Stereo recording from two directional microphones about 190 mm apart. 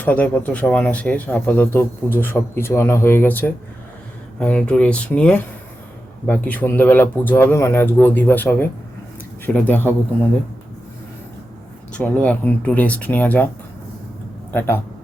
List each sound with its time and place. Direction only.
0.0 s speech: 10° left (ahead or behind)
11.9 s speech: 5° left (ahead or behind)